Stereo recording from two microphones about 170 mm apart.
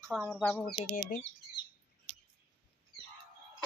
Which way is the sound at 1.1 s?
60° left (ahead or behind).